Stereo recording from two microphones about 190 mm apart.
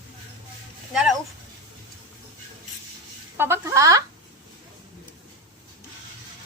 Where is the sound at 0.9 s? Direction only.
Centre (ahead or behind).